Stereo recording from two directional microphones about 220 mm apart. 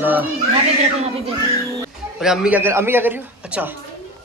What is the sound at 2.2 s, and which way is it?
A man's voice, 5° right (ahead or behind).